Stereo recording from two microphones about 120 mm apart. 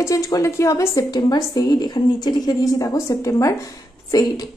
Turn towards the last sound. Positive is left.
turn(degrees=30)  # may be behind; listen again after turning